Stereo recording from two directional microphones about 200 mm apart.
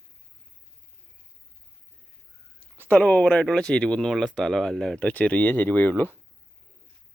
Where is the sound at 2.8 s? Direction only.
10° left (ahead or behind).